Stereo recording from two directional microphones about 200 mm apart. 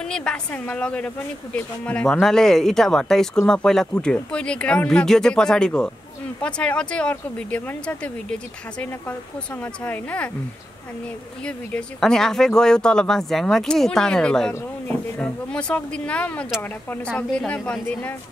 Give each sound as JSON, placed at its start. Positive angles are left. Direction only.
{"t": 0.0, "sound": "a woman's voice", "side_deg": 5}
{"t": 11.4, "sound": "a woman's voice", "side_deg": 5}